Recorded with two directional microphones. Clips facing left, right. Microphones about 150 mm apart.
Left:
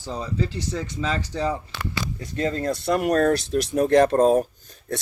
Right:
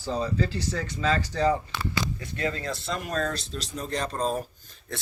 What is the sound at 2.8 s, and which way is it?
Speech, 60° left (ahead or behind).